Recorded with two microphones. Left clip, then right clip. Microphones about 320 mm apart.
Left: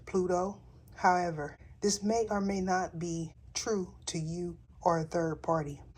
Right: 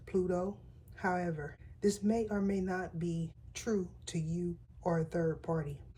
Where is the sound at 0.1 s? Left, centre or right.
Centre.